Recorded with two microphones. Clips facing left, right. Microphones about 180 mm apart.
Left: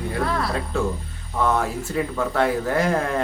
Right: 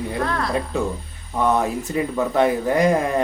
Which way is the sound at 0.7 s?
15° right (ahead or behind).